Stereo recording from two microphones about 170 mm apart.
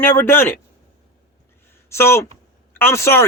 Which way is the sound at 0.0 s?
10° left (ahead or behind).